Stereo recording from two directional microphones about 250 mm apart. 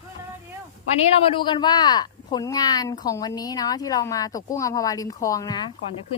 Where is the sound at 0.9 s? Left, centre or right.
Left.